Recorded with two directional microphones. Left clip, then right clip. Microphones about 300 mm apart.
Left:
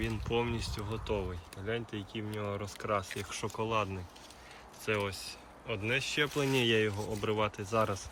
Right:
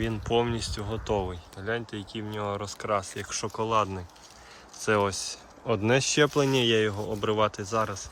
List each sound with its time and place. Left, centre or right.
0.0 s speech: centre